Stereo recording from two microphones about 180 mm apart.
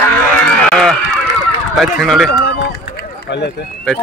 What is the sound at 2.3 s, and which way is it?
Run, 65° left (ahead or behind).